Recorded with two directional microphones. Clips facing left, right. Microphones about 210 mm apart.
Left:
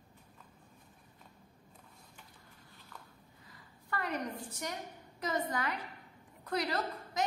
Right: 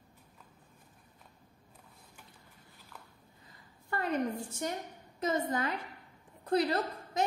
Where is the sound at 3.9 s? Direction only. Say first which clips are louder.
Right 5 dB; 25° right (ahead or behind).